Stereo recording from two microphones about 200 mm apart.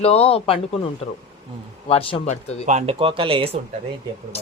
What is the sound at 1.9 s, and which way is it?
Speech, 30° left (ahead or behind).